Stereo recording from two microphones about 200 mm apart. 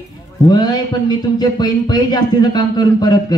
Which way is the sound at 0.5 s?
20° left (ahead or behind).